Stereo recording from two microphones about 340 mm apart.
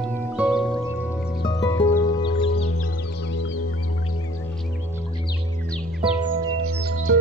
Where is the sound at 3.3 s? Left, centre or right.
Left.